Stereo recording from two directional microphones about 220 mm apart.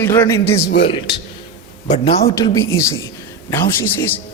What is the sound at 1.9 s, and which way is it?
Speech, 30° left (ahead or behind).